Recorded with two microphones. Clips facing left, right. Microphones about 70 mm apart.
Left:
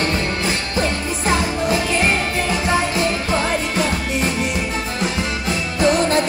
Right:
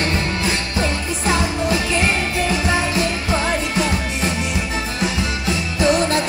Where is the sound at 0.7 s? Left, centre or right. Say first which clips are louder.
Left 1 dB; left.